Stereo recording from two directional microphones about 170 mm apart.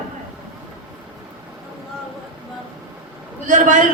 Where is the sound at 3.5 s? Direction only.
50° right (ahead or behind).